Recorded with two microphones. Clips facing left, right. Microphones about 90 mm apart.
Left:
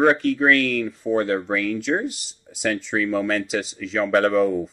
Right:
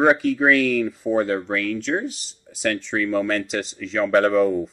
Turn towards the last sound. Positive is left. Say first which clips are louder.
# right 1 dB
turn(degrees=0)  # may be behind; listen again after turning